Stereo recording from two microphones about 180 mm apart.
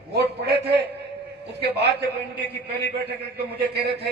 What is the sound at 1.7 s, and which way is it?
A man's voice, 65° right (ahead or behind).